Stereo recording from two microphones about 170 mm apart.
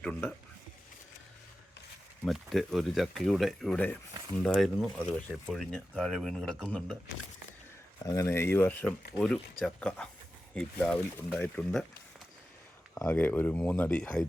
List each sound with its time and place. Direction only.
0.0 s speech: 10° left (ahead or behind)
2.2 s speech: centre (ahead or behind)
8.0 s speech: 20° left (ahead or behind)
12.9 s speech: 10° left (ahead or behind)